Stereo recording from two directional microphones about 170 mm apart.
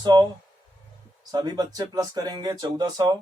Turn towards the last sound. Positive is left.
turn(degrees=-25)  # may be behind; listen again after turning